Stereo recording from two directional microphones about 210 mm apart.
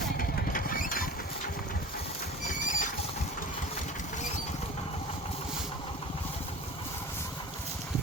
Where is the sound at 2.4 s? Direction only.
35° left (ahead or behind).